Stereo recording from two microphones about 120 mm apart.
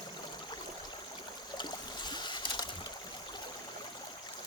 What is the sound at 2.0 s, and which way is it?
Boat, 40° left (ahead or behind).